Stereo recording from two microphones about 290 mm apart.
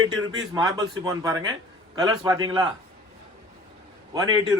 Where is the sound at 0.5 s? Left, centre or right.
Centre.